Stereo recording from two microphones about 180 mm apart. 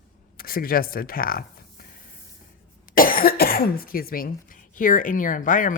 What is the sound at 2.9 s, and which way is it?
Speech, 50° left (ahead or behind).